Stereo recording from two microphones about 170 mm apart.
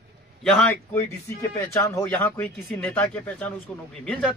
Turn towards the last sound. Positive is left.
turn(degrees=5)  # may be behind; listen again after turning